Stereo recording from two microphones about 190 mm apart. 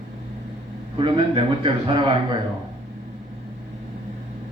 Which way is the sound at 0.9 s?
25° right (ahead or behind).